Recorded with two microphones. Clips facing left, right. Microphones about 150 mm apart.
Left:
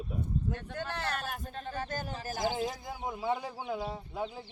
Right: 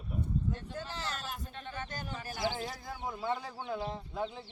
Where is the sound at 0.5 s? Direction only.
65° left (ahead or behind).